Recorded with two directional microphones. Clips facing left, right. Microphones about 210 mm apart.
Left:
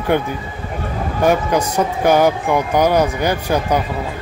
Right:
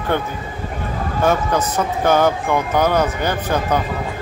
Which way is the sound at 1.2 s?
15° left (ahead or behind).